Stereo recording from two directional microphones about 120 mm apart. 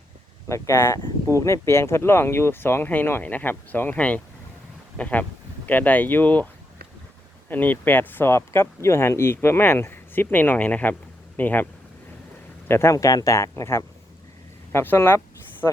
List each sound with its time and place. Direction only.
0.4 s speech: 25° left (ahead or behind)
7.5 s speech: 15° left (ahead or behind)